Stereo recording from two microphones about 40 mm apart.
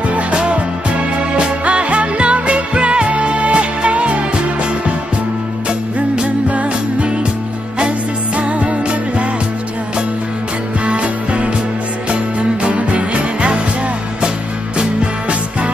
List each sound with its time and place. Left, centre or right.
0.1 s music: right
5.9 s music: right
8.4 s music: right
10.9 s music: right
14.8 s music: right